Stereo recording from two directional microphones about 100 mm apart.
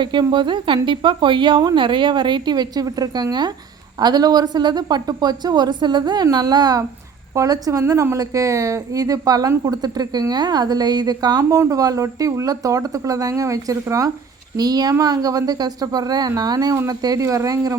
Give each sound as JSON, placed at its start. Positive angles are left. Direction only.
{"t": 0.0, "sound": "a woman's voice", "side_deg": -50}